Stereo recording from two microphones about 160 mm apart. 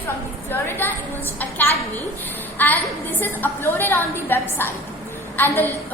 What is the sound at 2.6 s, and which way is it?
A woman's voice, 10° left (ahead or behind).